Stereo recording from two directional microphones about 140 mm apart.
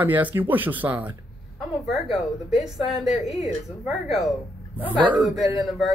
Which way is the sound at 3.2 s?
Centre (ahead or behind).